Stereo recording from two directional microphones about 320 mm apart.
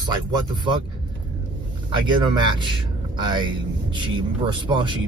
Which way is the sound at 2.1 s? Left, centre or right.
Centre.